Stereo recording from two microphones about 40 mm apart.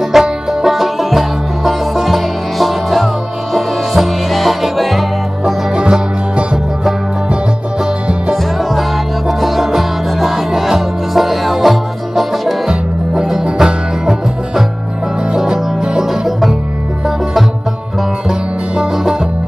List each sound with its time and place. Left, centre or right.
0.1 s music: centre
5.4 s music: right
9.4 s music: centre
12.6 s music: centre